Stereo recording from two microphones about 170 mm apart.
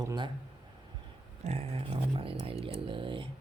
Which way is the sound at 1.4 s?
40° right (ahead or behind).